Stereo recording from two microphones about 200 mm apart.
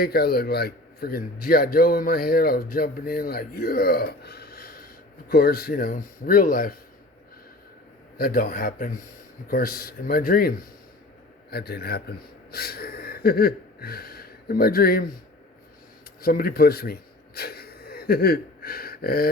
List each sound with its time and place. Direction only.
0.0 s a man's voice: 50° left (ahead or behind)
8.2 s a man's voice: 45° left (ahead or behind)
16.2 s a sound: 45° left (ahead or behind)